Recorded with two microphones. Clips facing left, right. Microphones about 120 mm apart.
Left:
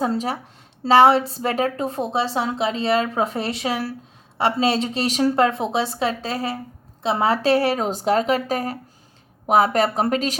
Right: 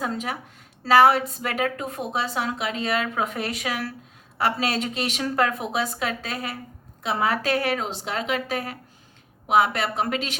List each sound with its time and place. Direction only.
0.0 s a woman's voice: 35° left (ahead or behind)